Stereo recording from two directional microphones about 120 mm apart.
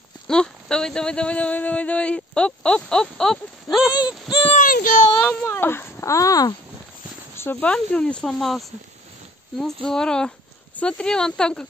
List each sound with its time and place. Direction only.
0.3 s speech: 5° left (ahead or behind)
3.9 s a sound: 35° left (ahead or behind)
4.5 s a child's voice: 90° left
5.2 s speech: 15° left (ahead or behind)
7.3 s speech: 20° left (ahead or behind)
7.7 s speech: 10° left (ahead or behind)